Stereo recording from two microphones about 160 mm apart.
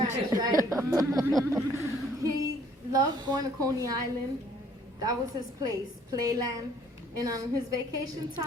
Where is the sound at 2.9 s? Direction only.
25° right (ahead or behind).